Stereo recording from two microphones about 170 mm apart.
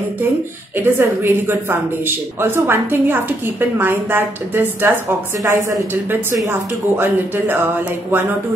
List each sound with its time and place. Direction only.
0.7 s speech: 15° right (ahead or behind)